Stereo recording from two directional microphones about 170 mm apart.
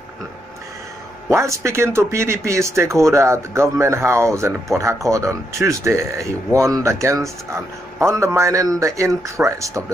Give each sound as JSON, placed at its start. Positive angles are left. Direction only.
{"t": 1.3, "sound": "speech", "side_deg": -15}